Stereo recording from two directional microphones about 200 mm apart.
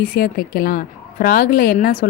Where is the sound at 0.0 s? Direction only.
45° left (ahead or behind).